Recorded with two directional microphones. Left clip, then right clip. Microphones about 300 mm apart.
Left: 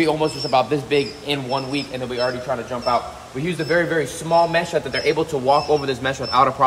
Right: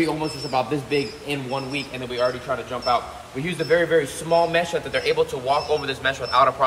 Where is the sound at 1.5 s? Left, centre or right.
Left.